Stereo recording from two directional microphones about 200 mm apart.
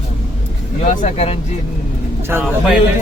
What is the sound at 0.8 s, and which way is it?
Speech, 35° left (ahead or behind).